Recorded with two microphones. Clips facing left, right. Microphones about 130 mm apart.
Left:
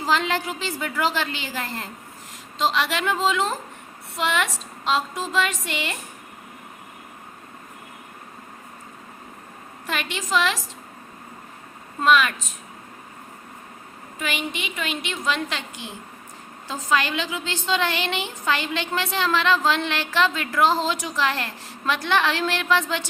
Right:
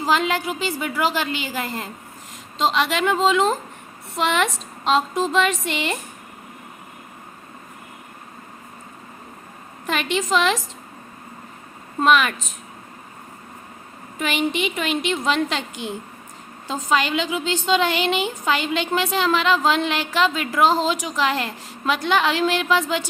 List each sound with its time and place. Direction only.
0.0 s a woman's voice: 15° right (ahead or behind)
9.8 s a woman's voice: 25° right (ahead or behind)
14.2 s a woman's voice: 30° right (ahead or behind); by 23.0 s 10° right (ahead or behind)